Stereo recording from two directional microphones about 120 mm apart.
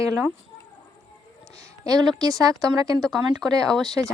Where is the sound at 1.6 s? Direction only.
30° right (ahead or behind).